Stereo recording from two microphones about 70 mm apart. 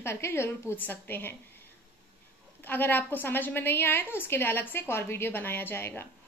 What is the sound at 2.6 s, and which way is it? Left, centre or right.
A woman's voice, left.